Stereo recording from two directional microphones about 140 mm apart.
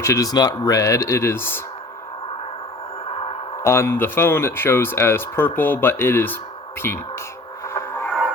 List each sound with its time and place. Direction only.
0.0 s speech: 20° left (ahead or behind)
3.6 s speech: 20° left (ahead or behind)
7.7 s music: 20° left (ahead or behind)